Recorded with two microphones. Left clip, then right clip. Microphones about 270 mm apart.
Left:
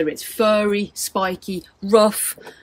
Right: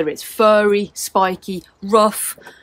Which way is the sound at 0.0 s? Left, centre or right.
Centre.